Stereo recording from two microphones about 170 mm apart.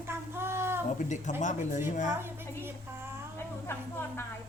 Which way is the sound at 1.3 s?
45° left (ahead or behind).